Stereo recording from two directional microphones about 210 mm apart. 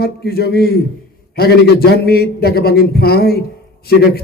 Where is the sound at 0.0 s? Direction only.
50° left (ahead or behind).